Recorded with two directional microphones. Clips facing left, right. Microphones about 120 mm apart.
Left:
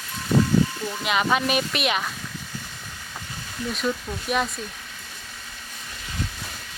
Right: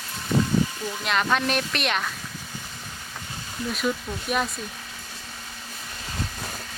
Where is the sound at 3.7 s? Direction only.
5° right (ahead or behind).